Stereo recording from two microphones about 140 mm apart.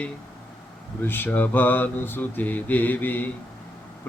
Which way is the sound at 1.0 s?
15° left (ahead or behind).